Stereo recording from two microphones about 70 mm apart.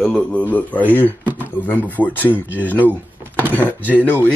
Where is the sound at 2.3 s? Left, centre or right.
Right.